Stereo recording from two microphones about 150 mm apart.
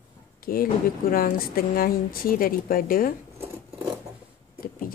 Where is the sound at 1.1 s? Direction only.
75° left (ahead or behind).